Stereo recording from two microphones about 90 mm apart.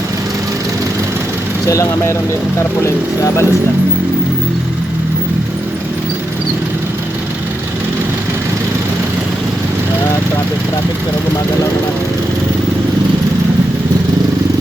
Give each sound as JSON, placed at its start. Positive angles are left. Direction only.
{"t": 1.6, "sound": "speech", "side_deg": 35}